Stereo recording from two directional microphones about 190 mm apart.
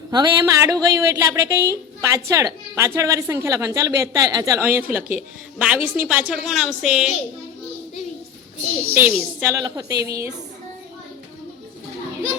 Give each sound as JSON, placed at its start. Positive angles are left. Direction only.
{"t": 0.1, "sound": "a woman's voice", "side_deg": -20}
{"t": 9.0, "sound": "a woman's voice", "side_deg": -10}